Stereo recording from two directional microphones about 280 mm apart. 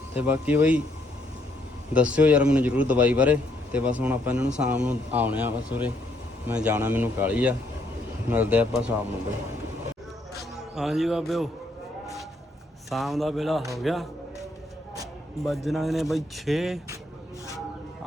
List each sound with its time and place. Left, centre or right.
0.2 s a man's voice: centre
1.9 s a man's voice: centre
10.8 s a man's voice: centre
12.9 s a man's voice: centre
15.4 s a man's voice: centre